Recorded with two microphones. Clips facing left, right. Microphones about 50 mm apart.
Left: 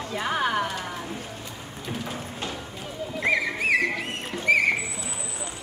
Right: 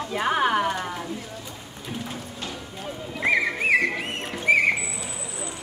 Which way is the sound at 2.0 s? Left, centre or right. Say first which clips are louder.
Left 1 dB; left.